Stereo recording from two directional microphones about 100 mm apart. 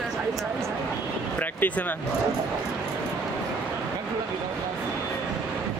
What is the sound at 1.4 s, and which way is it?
Speech, 15° left (ahead or behind).